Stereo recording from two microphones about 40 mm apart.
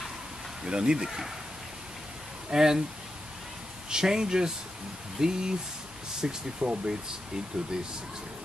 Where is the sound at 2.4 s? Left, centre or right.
Centre.